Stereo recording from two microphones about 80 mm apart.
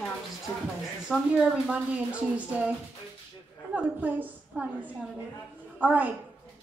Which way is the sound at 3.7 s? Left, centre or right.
Centre.